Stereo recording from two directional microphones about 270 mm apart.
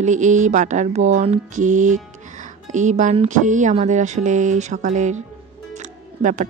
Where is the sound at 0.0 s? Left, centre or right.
Right.